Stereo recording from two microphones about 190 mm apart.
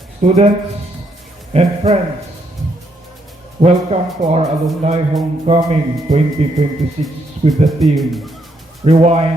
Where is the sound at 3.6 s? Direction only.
35° right (ahead or behind).